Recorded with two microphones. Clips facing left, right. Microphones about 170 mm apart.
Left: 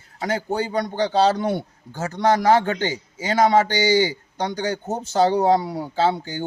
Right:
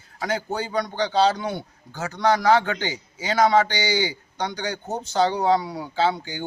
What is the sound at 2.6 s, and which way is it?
Speech, 35° left (ahead or behind).